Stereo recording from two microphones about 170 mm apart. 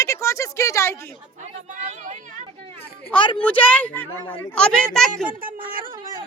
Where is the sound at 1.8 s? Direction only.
45° right (ahead or behind).